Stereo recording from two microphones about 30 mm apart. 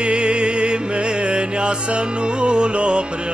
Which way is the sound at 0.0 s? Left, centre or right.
Right.